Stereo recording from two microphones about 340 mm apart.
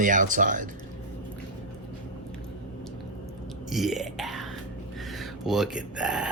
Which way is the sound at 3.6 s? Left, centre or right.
Centre.